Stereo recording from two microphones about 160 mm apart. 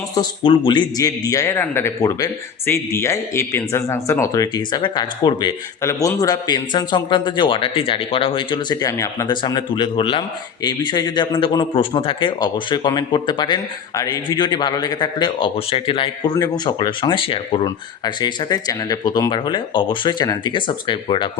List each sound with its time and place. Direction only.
0.1 s a man's voice: 25° left (ahead or behind)